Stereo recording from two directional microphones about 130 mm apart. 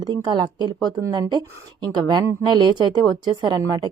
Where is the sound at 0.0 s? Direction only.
35° right (ahead or behind).